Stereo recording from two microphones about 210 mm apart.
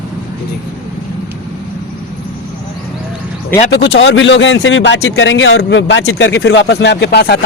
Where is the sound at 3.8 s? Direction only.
60° left (ahead or behind).